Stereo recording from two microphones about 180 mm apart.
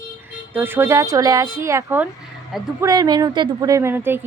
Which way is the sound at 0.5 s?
10° right (ahead or behind).